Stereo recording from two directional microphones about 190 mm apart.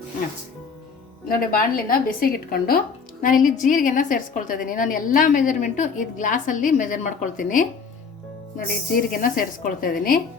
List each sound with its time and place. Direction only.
1.3 s a woman's voice: 50° left (ahead or behind)